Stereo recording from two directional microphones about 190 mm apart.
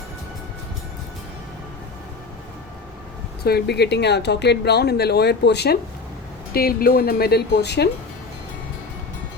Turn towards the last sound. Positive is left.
turn(degrees=60)  # may be behind; listen again after turning